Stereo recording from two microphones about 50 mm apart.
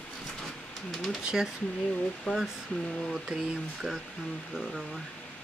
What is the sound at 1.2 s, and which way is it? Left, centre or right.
Speech, centre.